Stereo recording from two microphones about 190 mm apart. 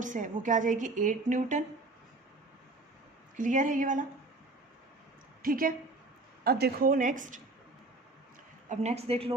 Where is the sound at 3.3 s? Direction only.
40° right (ahead or behind).